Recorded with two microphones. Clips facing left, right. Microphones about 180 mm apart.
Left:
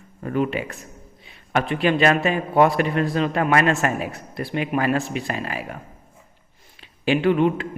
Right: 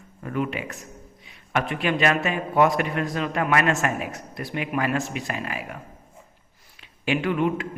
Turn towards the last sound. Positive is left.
turn(degrees=30)  # may be behind; listen again after turning